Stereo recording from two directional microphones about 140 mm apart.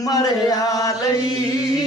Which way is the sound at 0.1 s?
25° left (ahead or behind).